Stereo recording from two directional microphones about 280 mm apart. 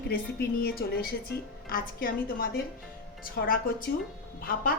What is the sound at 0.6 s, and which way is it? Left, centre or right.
Speech, left.